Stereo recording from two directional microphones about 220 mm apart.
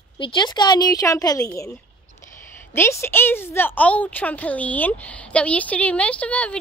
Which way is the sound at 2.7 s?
10° left (ahead or behind).